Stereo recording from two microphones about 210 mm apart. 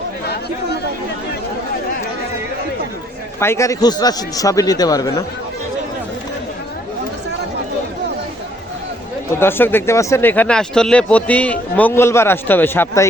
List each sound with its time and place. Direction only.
3.4 s speech: 15° left (ahead or behind)
9.4 s speech: 10° left (ahead or behind)